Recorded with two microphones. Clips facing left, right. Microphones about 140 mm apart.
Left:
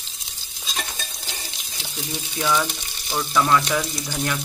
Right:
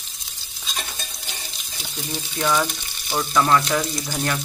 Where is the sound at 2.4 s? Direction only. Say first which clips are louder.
Right 1 dB; 15° right (ahead or behind).